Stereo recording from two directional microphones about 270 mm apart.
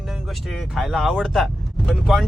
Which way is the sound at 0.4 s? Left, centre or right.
Centre.